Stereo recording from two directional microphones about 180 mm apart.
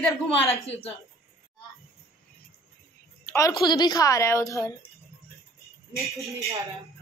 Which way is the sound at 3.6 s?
25° left (ahead or behind).